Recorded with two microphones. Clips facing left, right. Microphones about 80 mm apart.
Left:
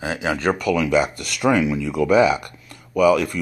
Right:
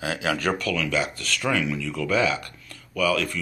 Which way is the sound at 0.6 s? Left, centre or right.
Centre.